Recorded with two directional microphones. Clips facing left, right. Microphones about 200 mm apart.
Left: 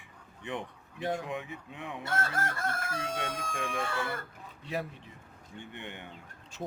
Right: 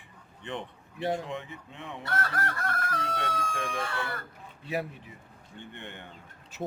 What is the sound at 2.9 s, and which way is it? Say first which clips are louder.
Speech: right 2 dB; 15° left (ahead or behind).